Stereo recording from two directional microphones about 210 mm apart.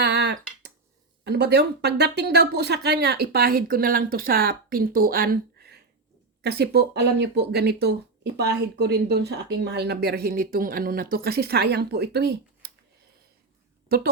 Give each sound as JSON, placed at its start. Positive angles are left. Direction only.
{"t": 0.0, "sound": "finger snapping", "side_deg": -55}
{"t": 1.2, "sound": "speech", "side_deg": -50}
{"t": 13.8, "sound": "a woman's voice", "side_deg": -45}